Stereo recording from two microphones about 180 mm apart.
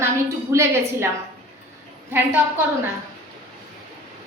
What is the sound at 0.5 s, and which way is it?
Speech, 15° right (ahead or behind).